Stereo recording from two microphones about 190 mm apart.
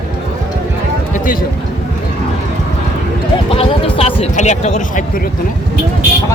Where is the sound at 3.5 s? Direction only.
30° left (ahead or behind).